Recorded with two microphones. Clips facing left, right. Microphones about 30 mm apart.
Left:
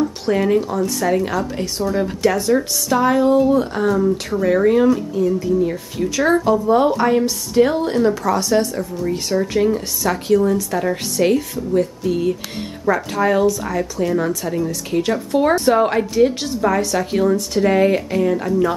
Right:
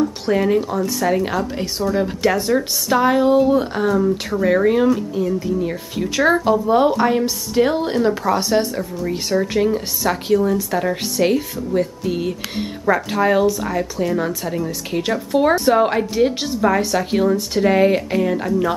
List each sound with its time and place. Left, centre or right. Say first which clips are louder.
0.0 s speech: even; centre
2.9 s speech: even; centre